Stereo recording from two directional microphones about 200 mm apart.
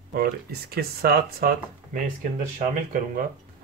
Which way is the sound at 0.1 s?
50° right (ahead or behind).